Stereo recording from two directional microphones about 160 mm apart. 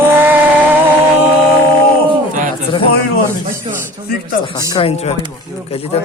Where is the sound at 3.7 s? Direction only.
35° right (ahead or behind).